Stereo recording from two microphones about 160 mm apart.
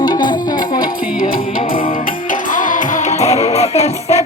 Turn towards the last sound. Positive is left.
turn(degrees=45)  # may be behind; listen again after turning